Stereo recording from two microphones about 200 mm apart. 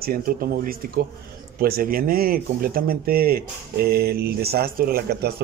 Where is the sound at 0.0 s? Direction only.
45° right (ahead or behind).